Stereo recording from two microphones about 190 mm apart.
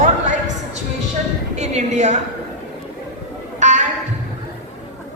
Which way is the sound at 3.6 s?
40° right (ahead or behind).